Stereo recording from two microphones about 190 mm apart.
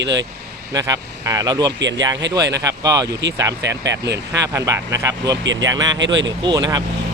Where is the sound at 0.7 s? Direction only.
20° right (ahead or behind).